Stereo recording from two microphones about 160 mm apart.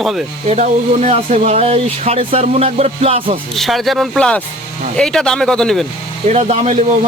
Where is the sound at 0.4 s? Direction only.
45° right (ahead or behind).